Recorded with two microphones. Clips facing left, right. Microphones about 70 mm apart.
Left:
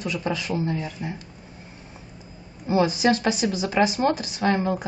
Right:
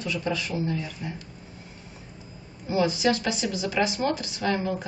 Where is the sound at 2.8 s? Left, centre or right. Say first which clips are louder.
Left 3 dB; left.